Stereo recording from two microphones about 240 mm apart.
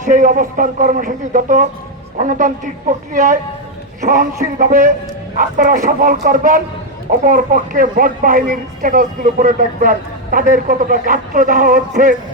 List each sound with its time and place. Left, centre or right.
0.0 s speech: right